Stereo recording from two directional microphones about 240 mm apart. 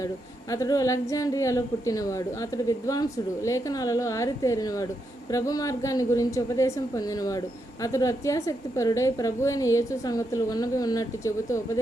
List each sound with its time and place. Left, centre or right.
0.5 s a woman's voice: centre